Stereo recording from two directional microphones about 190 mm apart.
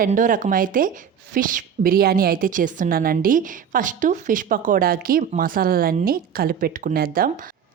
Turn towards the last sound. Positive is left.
turn(degrees=-50)  # may be behind; listen again after turning